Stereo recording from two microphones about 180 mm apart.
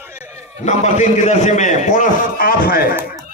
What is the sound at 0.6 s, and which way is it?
A man's voice, 40° left (ahead or behind).